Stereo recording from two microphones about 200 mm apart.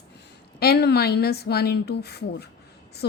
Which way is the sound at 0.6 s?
55° left (ahead or behind).